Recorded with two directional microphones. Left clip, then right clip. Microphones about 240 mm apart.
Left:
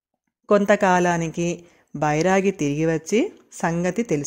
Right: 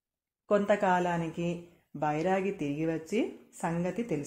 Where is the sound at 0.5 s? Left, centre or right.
Left.